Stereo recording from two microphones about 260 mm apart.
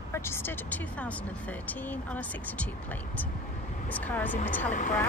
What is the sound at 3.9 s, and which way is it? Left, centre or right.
Speech, centre.